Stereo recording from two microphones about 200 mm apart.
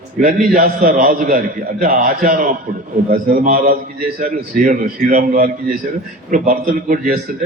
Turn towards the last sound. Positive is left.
turn(degrees=-40)  # may be behind; listen again after turning